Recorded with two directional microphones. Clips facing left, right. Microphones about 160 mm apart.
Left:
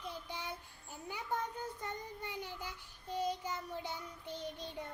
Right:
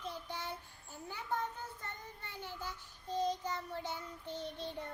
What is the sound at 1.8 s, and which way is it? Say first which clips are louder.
Child singing: left 5 dB; 15° left (ahead or behind).